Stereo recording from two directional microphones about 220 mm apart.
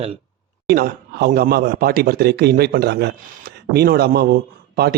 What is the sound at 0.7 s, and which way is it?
Speech, 45° right (ahead or behind).